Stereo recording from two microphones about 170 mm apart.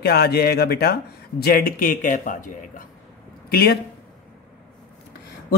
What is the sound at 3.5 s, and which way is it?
Speech, 65° left (ahead or behind).